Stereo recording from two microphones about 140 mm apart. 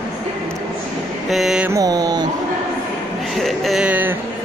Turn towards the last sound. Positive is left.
turn(degrees=-10)  # may be behind; listen again after turning